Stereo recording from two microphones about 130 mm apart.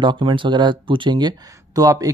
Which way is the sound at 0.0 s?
40° right (ahead or behind).